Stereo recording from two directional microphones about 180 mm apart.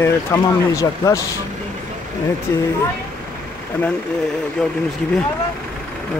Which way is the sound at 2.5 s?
15° left (ahead or behind).